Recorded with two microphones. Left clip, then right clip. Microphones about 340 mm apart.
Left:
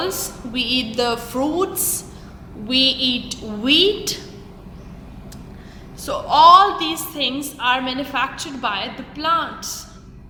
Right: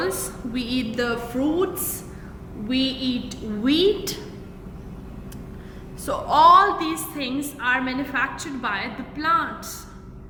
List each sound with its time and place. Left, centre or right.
0.0 s a woman's voice: centre
6.1 s a woman's voice: centre